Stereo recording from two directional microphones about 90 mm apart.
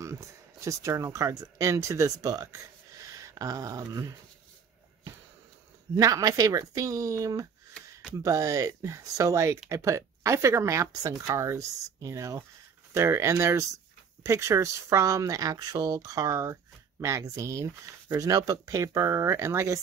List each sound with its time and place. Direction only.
0.0 s speech: 35° right (ahead or behind)
5.9 s speech: 40° right (ahead or behind)